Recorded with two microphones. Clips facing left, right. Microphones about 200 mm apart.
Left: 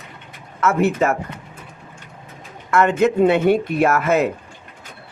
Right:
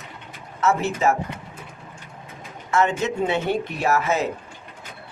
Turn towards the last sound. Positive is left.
turn(degrees=55)  # may be behind; listen again after turning